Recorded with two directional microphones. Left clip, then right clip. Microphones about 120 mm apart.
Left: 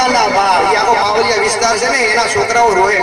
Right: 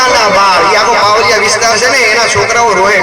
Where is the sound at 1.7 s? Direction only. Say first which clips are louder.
Right 5 dB; 40° right (ahead or behind).